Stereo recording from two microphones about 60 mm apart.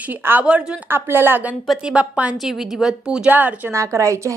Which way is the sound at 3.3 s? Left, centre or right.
Right.